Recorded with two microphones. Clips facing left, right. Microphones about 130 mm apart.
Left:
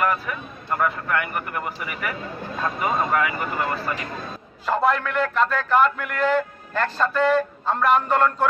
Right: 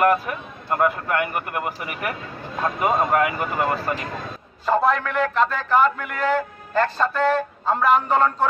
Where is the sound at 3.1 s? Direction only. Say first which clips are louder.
Right 3 dB; 45° right (ahead or behind).